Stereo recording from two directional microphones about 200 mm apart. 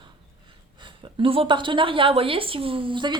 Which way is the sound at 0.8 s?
25° right (ahead or behind).